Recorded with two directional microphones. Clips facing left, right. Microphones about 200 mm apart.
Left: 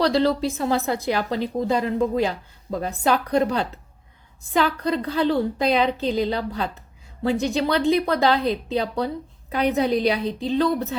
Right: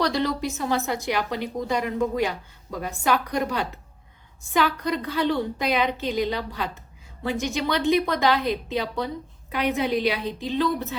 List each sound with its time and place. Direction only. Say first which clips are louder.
0.0 s a woman's voice: left 5 dB; 30° left (ahead or behind)